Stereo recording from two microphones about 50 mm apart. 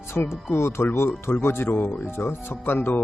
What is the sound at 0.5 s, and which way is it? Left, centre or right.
Speech, left.